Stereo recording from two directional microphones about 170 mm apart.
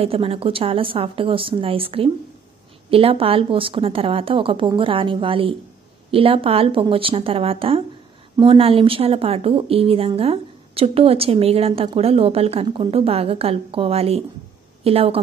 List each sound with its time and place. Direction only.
0.0 s speech: 35° right (ahead or behind)